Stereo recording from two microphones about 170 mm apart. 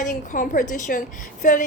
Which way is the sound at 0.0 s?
50° left (ahead or behind).